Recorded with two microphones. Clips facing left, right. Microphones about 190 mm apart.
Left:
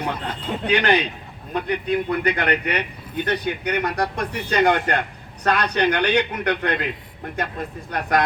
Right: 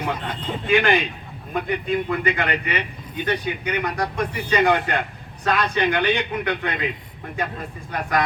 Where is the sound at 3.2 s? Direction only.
65° left (ahead or behind).